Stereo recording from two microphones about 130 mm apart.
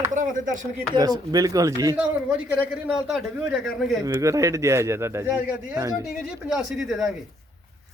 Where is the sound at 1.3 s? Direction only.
30° right (ahead or behind).